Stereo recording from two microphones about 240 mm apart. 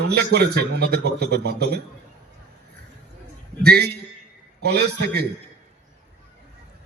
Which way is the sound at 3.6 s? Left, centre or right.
Right.